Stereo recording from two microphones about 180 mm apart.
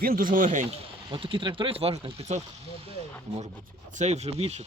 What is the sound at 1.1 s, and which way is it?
Speech, 30° right (ahead or behind).